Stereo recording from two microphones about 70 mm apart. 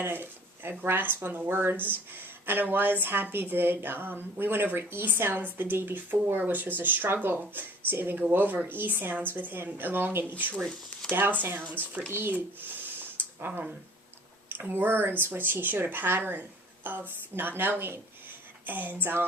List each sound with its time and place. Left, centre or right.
0.0 s speech: right
12.1 s a sound: right
14.5 s a woman's voice: right